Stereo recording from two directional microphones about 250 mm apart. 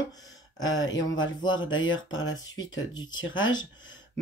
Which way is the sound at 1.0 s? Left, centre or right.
Left.